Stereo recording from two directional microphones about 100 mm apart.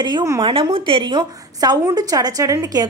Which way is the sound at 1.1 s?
40° right (ahead or behind).